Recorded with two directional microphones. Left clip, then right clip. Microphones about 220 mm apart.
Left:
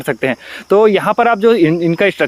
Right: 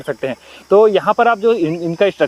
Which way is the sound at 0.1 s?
45° left (ahead or behind).